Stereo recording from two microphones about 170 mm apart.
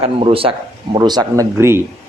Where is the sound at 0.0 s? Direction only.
35° right (ahead or behind); by 1.8 s 15° right (ahead or behind).